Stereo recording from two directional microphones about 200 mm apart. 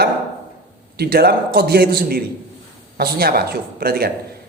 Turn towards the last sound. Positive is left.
turn(degrees=-50)  # may be behind; listen again after turning